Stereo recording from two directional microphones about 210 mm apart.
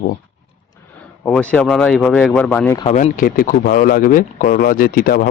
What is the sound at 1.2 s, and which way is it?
Speech, 5° left (ahead or behind).